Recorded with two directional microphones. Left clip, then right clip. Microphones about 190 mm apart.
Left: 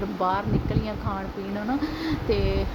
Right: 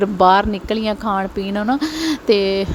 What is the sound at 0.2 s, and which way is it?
Speech, 45° right (ahead or behind).